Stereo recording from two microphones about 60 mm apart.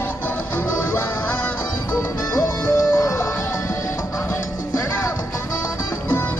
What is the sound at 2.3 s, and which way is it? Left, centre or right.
Music, left.